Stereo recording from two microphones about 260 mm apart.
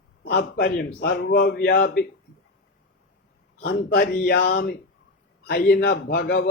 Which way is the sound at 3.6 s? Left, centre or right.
Left.